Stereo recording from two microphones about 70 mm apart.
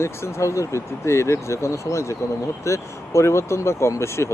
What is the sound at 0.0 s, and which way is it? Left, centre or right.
Speech, left.